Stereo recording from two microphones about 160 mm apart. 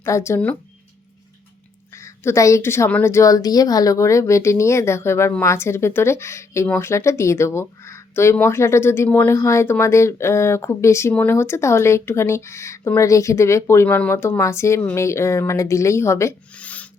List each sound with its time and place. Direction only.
0.0 s speech: 15° left (ahead or behind)
2.2 s speech: 20° left (ahead or behind)